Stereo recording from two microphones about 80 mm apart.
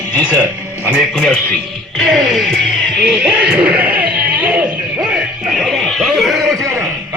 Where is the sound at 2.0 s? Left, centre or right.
Centre.